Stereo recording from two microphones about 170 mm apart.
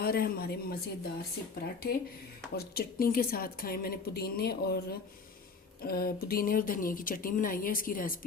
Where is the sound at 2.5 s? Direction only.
65° left (ahead or behind).